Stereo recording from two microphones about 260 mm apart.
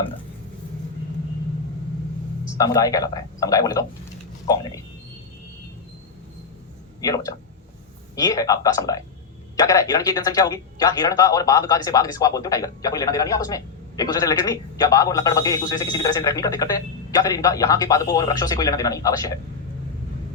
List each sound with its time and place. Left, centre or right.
2.6 s a man's voice: centre
7.0 s a man's voice: centre